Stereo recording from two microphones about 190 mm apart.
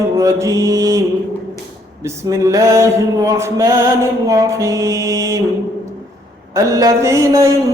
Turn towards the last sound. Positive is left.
turn(degrees=-15)  # may be behind; listen again after turning